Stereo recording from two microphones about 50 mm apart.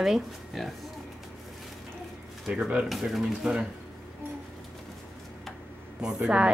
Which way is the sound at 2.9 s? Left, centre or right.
Centre.